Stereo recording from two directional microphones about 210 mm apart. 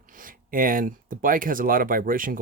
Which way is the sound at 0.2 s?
40° right (ahead or behind).